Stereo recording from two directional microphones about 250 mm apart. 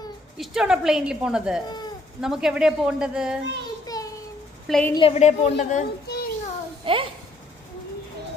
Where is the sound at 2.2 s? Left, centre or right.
Centre.